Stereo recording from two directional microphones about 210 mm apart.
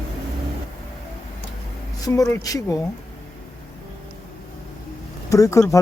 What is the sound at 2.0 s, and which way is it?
Speech, 15° left (ahead or behind).